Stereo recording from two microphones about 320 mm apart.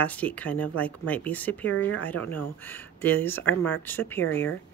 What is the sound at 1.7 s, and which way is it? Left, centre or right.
Speech, left.